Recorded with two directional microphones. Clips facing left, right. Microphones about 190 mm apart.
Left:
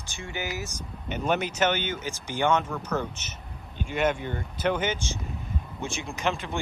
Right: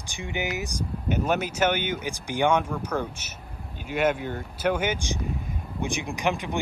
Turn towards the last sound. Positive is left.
turn(degrees=-15)  # may be behind; listen again after turning